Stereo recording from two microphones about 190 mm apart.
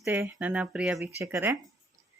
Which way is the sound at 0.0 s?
15° right (ahead or behind).